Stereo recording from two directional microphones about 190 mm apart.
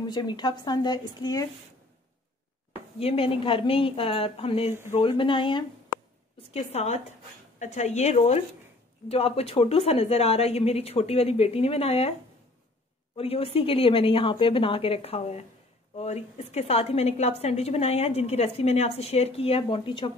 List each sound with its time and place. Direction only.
0.0 s a woman's voice: 25° left (ahead or behind)
3.0 s a woman's voice: 30° left (ahead or behind)
13.1 s a woman's voice: 30° left (ahead or behind)